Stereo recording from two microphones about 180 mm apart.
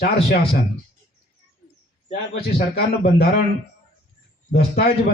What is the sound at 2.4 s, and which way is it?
Speech, 60° left (ahead or behind).